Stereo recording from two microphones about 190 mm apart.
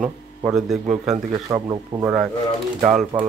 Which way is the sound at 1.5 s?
15° right (ahead or behind).